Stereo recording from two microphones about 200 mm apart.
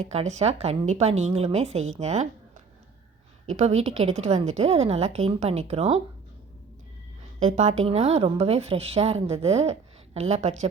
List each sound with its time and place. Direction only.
0.0 s a woman's voice: 35° right (ahead or behind)
3.5 s a woman's voice: 35° right (ahead or behind)
7.3 s a woman's voice: 35° right (ahead or behind)